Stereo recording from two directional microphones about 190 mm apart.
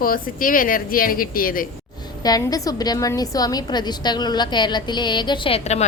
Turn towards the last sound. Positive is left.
turn(degrees=35)  # may be behind; listen again after turning